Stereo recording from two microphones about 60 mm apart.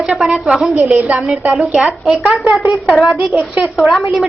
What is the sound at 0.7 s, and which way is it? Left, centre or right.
A woman's voice, right.